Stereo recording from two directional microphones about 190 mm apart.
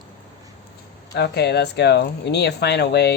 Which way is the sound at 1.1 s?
60° left (ahead or behind).